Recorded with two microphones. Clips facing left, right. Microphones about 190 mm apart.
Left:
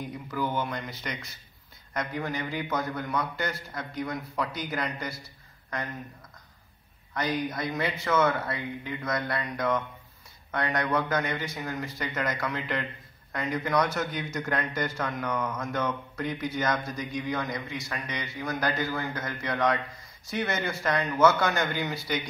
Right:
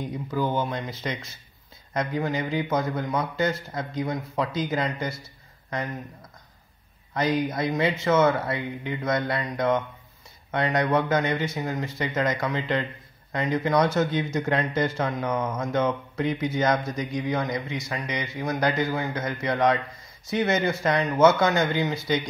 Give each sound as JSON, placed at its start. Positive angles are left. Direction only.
{"t": 0.0, "sound": "speech", "side_deg": -25}
{"t": 7.2, "sound": "speech", "side_deg": -25}